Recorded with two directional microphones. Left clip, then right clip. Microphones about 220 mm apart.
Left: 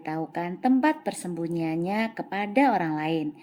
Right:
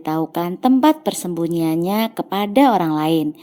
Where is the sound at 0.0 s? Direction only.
35° right (ahead or behind).